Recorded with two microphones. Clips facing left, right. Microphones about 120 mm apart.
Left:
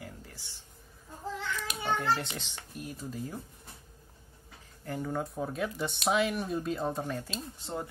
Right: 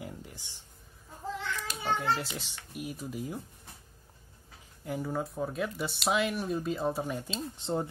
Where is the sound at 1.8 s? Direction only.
Centre (ahead or behind).